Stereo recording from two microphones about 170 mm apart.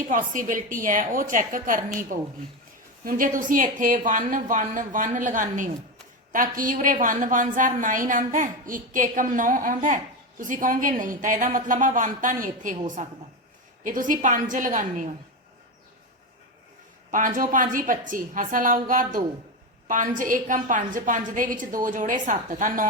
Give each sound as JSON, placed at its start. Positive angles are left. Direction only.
{"t": 0.1, "sound": "a woman's voice", "side_deg": -50}
{"t": 17.1, "sound": "a woman's voice", "side_deg": -50}